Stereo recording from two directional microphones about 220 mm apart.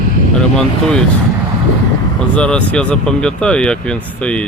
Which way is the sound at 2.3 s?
5° left (ahead or behind).